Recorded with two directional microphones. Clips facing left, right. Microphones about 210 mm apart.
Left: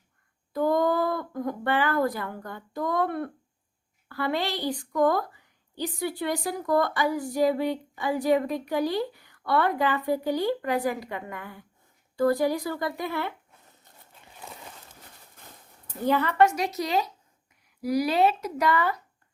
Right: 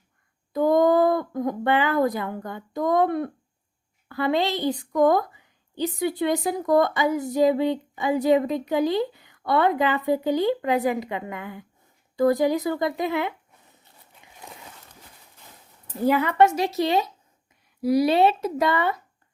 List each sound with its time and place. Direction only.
0.5 s a woman's voice: 20° right (ahead or behind)
16.0 s a woman's voice: 10° right (ahead or behind)
16.4 s a woman's voice: 25° right (ahead or behind)